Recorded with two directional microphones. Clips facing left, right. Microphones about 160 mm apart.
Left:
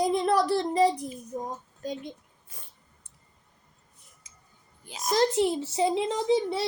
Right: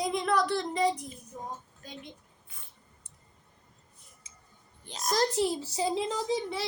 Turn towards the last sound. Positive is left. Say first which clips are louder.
# left 6 dB
turn(degrees=30)  # may be behind; listen again after turning